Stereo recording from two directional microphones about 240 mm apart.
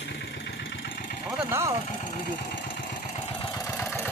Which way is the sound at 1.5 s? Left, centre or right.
Centre.